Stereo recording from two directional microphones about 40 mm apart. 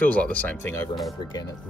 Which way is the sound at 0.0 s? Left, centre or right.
Left.